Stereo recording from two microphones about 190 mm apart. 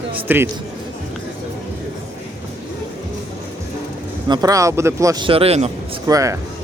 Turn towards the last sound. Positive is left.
turn(degrees=-15)  # may be behind; listen again after turning